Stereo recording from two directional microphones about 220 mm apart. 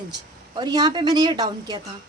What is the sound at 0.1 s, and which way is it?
A woman's voice, 20° right (ahead or behind).